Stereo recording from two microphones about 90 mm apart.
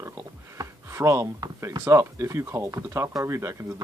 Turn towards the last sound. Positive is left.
turn(degrees=-35)  # may be behind; listen again after turning